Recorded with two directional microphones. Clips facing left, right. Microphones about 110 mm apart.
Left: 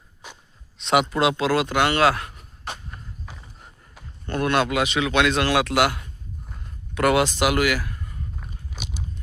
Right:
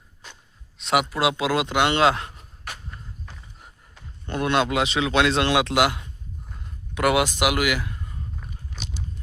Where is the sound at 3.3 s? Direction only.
10° left (ahead or behind).